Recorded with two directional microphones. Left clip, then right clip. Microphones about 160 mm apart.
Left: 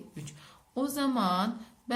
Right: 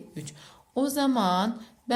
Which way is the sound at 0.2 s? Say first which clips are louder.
Right 8 dB; 20° right (ahead or behind).